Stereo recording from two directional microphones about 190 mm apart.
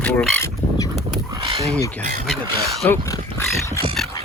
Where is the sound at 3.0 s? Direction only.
15° left (ahead or behind).